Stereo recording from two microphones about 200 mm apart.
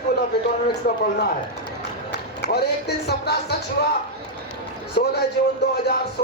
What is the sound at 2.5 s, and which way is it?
Speech, 55° left (ahead or behind).